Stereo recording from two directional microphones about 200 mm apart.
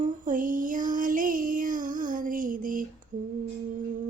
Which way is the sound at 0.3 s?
40° right (ahead or behind).